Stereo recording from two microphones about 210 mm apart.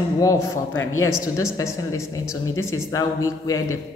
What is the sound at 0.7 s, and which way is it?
Speech, 70° left (ahead or behind).